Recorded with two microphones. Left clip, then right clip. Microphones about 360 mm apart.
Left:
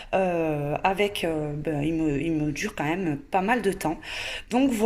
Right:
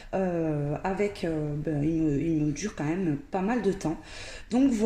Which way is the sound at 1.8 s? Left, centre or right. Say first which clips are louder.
Even; left.